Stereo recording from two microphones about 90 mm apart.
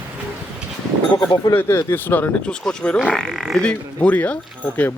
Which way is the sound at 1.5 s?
25° left (ahead or behind).